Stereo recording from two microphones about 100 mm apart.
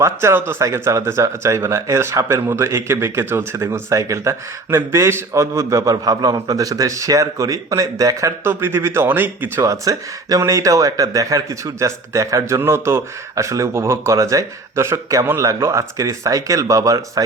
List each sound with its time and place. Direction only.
0.0 s speech: 25° right (ahead or behind)
8.4 s speech: 25° right (ahead or behind)
9.6 s speech: 35° right (ahead or behind)